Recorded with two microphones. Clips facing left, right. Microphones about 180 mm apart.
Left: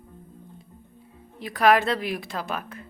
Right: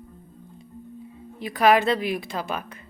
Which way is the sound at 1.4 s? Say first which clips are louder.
Right 1 dB; centre (ahead or behind).